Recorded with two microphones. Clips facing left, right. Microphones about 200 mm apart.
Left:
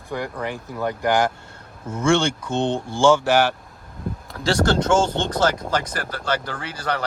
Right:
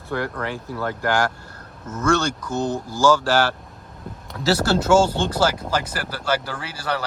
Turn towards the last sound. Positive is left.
turn(degrees=-10)  # may be behind; listen again after turning